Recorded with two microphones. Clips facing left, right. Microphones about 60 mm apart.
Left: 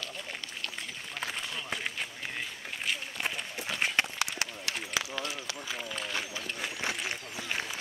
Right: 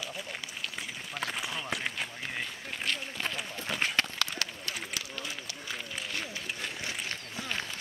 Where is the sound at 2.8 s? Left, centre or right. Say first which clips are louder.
Even; centre.